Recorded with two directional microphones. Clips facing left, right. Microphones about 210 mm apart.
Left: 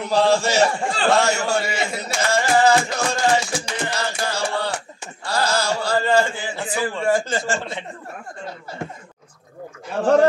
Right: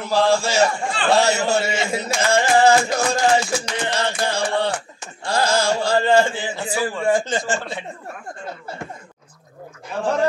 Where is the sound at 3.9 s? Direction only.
30° right (ahead or behind).